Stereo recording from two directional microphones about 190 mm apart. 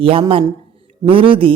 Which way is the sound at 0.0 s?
30° right (ahead or behind).